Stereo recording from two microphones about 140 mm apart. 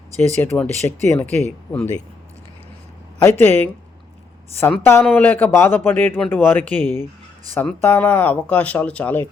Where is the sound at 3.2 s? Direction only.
15° left (ahead or behind).